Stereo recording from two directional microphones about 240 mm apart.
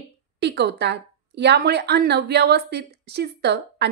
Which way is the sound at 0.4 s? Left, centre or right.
Right.